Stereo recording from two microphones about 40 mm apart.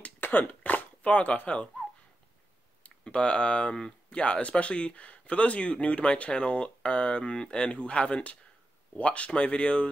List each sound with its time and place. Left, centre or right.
0.2 s cough: left
0.5 s a sound: left
1.0 s speech: left
2.8 s speech: left